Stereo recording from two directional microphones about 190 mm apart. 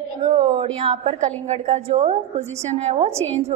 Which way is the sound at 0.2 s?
35° right (ahead or behind).